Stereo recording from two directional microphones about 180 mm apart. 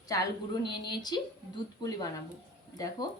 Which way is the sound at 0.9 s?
25° left (ahead or behind).